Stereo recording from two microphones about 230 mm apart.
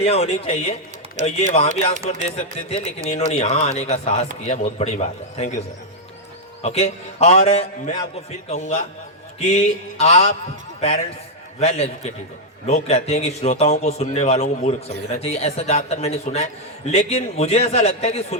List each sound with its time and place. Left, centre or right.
0.0 s a man's voice: left
6.6 s a man's voice: left